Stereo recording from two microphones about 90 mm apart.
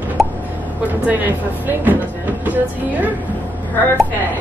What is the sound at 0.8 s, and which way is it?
A woman's voice, 15° right (ahead or behind).